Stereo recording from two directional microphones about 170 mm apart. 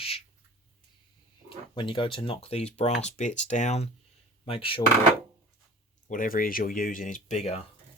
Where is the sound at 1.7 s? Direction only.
30° left (ahead or behind).